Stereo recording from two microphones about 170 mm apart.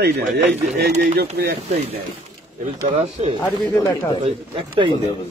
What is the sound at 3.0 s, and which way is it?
Speech, 35° right (ahead or behind).